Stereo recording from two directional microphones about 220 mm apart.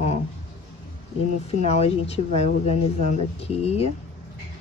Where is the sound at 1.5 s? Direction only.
30° left (ahead or behind).